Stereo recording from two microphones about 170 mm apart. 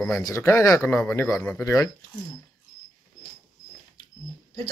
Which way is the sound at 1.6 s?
20° left (ahead or behind).